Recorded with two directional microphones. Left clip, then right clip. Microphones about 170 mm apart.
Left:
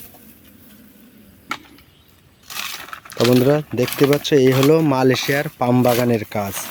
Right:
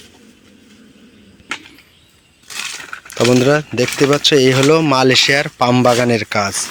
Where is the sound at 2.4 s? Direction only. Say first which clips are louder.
Right 3 dB; 20° left (ahead or behind).